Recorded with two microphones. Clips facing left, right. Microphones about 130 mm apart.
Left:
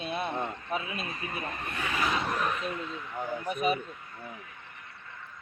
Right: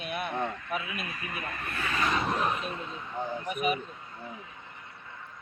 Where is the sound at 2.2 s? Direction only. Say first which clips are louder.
Right 1 dB; 25° right (ahead or behind).